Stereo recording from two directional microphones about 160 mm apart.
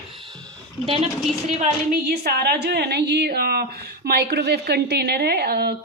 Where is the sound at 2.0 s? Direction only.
75° right (ahead or behind).